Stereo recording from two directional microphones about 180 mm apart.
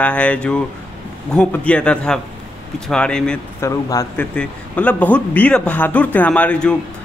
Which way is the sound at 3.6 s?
20° left (ahead or behind).